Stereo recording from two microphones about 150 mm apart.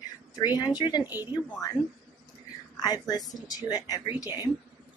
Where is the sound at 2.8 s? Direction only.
25° left (ahead or behind).